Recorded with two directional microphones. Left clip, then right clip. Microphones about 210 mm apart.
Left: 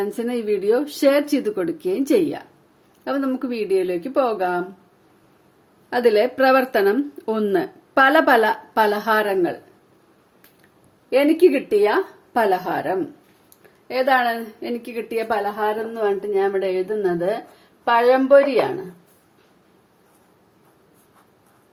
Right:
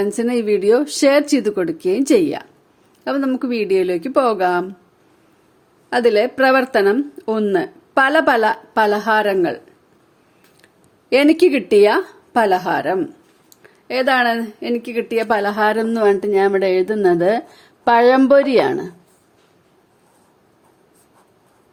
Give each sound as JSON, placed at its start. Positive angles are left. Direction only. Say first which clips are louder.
{"t": 0.0, "sound": "speech", "louder": "right 5 dB", "side_deg": -30}
{"t": 5.9, "sound": "speech", "louder": "right 2 dB", "side_deg": -25}
{"t": 11.1, "sound": "a woman's voice", "louder": "right 3 dB", "side_deg": -50}